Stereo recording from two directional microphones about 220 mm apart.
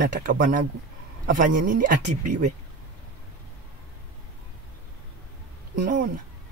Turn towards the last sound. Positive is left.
turn(degrees=-35)  # may be behind; listen again after turning